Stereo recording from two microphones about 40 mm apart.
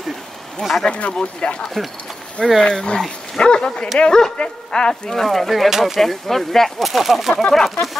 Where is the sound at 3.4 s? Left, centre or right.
Left.